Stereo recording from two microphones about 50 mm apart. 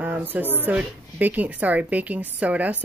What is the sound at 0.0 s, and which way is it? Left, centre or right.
A woman's voice, right.